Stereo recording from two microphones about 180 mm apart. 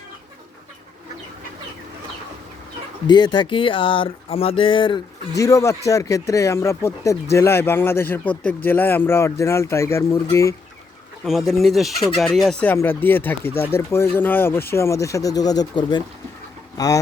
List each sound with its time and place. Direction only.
3.1 s speech: 25° left (ahead or behind)
5.4 s speech: 15° left (ahead or behind)
11.2 s speech: centre (ahead or behind); by 17.0 s 20° left (ahead or behind)